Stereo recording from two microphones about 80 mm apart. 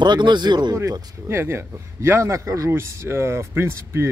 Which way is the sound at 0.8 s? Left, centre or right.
Right.